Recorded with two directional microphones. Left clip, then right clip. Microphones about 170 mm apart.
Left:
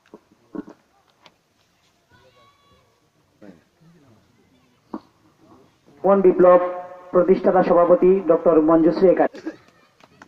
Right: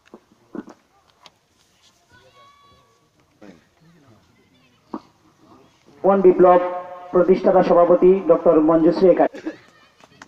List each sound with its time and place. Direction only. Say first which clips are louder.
6.0 s speech: right 1 dB; 15° right (ahead or behind)